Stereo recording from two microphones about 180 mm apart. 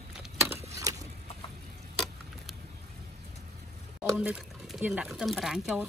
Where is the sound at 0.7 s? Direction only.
20° right (ahead or behind).